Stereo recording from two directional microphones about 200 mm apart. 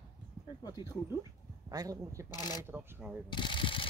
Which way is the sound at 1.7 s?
15° right (ahead or behind).